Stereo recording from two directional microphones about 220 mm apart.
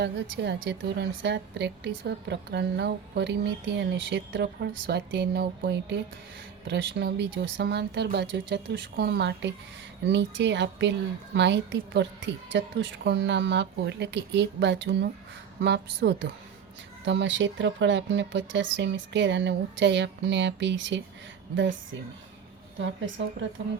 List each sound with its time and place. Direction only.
0.0 s a woman's voice: 55° right (ahead or behind)